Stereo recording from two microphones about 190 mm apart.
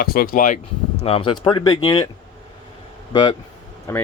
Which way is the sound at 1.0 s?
30° left (ahead or behind).